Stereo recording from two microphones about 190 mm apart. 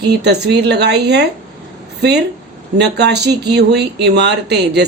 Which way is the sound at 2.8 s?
65° right (ahead or behind).